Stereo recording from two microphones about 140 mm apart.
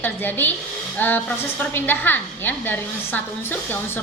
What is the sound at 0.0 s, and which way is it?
A woman's voice, 15° left (ahead or behind).